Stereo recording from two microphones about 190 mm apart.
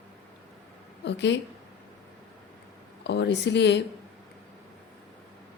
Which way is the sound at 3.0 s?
65° left (ahead or behind).